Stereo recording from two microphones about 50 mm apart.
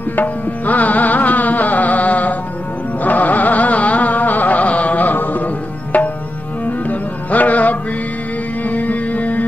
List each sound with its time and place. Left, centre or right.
0.1 s music: left